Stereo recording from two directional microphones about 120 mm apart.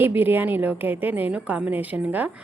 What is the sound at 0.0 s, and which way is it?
A woman's voice, 15° right (ahead or behind).